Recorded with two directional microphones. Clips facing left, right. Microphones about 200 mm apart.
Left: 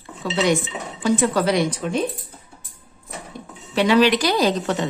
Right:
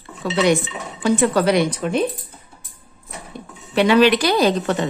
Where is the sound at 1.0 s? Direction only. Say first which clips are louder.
Right 2 dB; 60° right (ahead or behind).